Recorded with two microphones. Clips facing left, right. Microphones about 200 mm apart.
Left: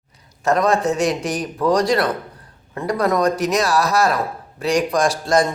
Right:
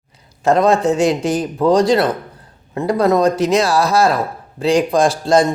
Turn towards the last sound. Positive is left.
turn(degrees=-30)  # may be behind; listen again after turning